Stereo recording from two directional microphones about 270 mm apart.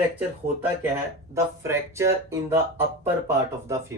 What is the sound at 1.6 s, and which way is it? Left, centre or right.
Speech, centre.